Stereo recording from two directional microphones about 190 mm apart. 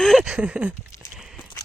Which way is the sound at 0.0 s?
Centre (ahead or behind).